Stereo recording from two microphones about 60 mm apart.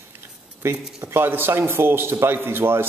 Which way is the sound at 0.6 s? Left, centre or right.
Right.